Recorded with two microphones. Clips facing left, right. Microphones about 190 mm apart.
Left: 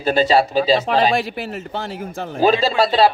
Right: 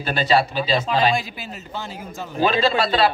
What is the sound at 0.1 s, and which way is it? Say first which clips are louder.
Speech: left 4 dB; 40° left (ahead or behind).